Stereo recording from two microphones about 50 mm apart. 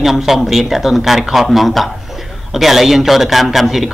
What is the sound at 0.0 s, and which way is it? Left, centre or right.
Speech, centre.